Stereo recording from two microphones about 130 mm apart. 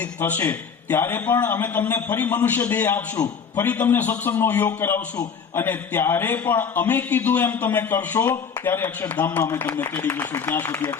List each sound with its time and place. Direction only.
0.0 s a man's voice: 15° left (ahead or behind)
9.4 s a man's voice: 25° left (ahead or behind)